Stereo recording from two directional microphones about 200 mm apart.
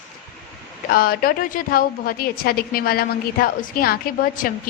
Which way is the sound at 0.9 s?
50° left (ahead or behind).